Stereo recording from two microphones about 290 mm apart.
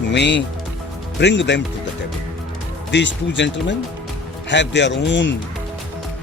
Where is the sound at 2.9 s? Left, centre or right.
Left.